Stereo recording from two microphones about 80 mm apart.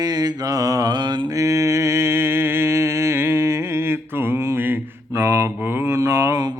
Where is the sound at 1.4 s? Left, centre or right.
Right.